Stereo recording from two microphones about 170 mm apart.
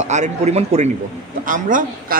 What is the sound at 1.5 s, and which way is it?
Speech, 50° right (ahead or behind).